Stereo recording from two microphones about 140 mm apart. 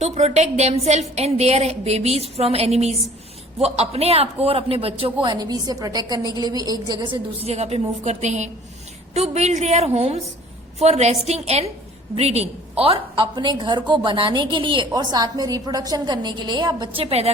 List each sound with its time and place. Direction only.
0.0 s a woman's voice: 50° right (ahead or behind)
5.2 s a woman's voice: 30° right (ahead or behind); by 17.3 s 45° right (ahead or behind)